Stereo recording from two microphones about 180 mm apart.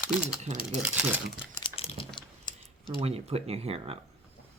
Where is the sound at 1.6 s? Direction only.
30° left (ahead or behind).